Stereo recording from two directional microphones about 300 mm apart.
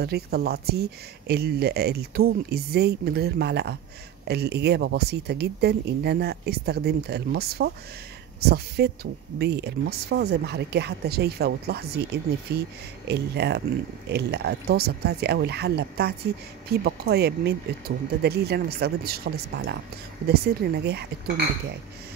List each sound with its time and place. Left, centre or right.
0.0 s speech: right